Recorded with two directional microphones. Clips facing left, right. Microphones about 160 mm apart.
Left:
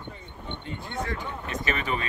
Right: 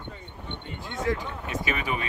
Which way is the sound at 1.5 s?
10° right (ahead or behind).